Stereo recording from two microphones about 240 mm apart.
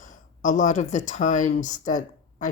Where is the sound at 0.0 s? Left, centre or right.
Left.